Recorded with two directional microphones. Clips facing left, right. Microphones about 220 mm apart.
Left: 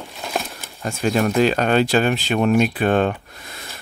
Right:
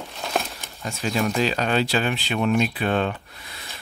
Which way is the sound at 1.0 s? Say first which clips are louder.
Left 6 dB; 50° left (ahead or behind).